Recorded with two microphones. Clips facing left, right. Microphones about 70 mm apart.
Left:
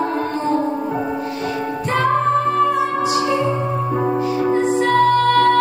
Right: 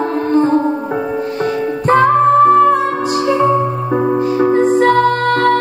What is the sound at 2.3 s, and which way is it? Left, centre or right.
Music, right.